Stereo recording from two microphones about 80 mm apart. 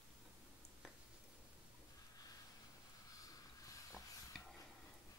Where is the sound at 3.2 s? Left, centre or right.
Left.